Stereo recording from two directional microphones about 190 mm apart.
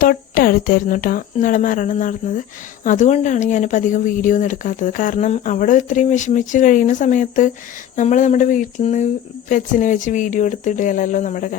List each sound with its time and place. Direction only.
0.0 s speech: 50° left (ahead or behind)